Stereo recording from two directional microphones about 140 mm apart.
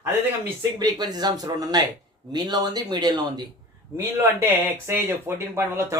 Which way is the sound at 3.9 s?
20° right (ahead or behind).